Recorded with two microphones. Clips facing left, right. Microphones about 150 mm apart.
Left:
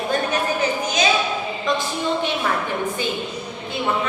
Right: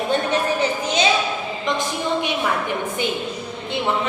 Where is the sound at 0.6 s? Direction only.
30° right (ahead or behind).